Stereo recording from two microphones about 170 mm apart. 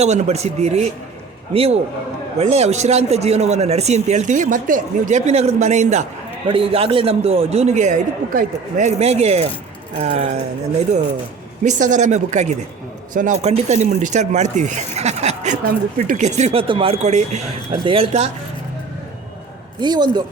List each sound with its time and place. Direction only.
0.0 s speech: 40° right (ahead or behind)
6.5 s speech: 35° right (ahead or behind)
11.6 s speech: 45° right (ahead or behind)
19.8 s a man's voice: 25° right (ahead or behind)